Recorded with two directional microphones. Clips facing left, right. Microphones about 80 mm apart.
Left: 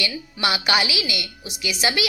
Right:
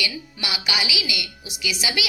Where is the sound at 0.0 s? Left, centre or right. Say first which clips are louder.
Left 5 dB; left.